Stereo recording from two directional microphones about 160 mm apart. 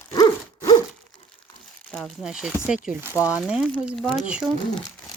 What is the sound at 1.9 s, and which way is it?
Speech, centre (ahead or behind).